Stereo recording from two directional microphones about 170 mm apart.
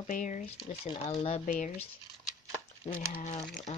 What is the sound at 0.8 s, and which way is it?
Speech, 40° left (ahead or behind).